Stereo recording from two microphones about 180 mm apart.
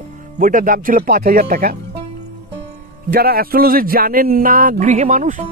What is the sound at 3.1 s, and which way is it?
Speech, 60° right (ahead or behind).